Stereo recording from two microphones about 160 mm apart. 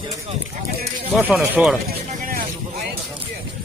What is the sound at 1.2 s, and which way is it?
Speech, 10° right (ahead or behind).